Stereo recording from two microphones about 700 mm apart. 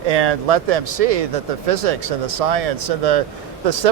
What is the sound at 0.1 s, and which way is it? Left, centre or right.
Speech, right.